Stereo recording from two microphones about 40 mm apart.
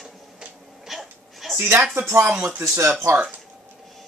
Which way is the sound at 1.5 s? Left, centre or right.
Right.